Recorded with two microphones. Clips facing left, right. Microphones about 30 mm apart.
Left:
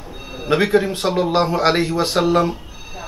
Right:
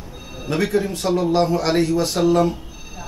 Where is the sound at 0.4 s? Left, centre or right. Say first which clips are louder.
Left 4 dB; left.